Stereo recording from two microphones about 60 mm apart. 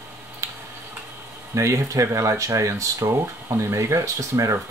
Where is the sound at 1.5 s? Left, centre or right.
Right.